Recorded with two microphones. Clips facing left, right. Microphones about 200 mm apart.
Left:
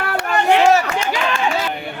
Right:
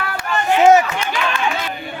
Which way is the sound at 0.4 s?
75° left (ahead or behind).